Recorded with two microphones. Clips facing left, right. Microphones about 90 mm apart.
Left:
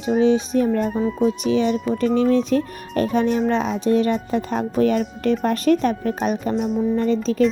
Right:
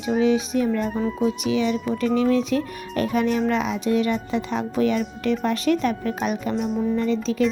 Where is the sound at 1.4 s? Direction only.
40° left (ahead or behind).